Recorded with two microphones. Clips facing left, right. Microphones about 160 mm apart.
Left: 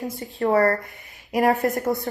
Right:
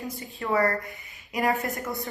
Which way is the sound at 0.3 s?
45° left (ahead or behind).